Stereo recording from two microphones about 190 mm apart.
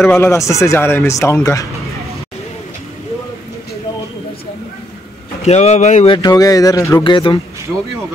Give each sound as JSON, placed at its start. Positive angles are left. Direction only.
{"t": 0.0, "sound": "speech", "side_deg": 10}
{"t": 5.4, "sound": "speech", "side_deg": 35}
{"t": 6.1, "sound": "speech", "side_deg": 20}